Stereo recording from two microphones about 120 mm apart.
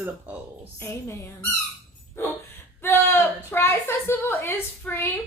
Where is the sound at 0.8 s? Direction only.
20° left (ahead or behind).